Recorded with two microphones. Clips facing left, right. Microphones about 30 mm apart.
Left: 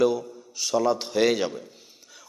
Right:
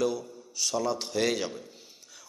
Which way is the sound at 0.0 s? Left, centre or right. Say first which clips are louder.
Left 7 dB; centre.